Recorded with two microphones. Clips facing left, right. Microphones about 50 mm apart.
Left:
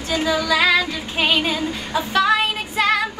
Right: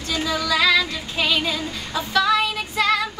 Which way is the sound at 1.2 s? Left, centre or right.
Left.